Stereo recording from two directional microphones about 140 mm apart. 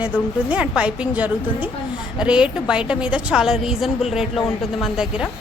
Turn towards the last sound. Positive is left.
turn(degrees=-5)  # may be behind; listen again after turning